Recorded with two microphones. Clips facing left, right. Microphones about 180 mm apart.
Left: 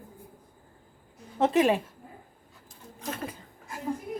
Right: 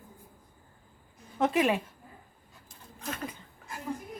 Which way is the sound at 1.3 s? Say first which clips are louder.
Left 3 dB; 30° left (ahead or behind).